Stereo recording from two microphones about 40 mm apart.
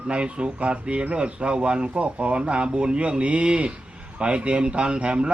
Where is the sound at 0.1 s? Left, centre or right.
Right.